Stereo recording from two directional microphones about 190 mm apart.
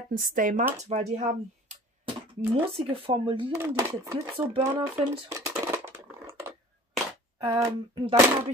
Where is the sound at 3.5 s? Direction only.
15° right (ahead or behind).